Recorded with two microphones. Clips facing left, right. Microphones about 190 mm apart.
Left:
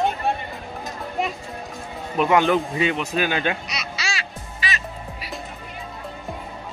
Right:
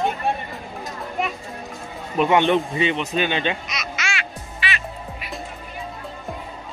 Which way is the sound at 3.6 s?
30° left (ahead or behind).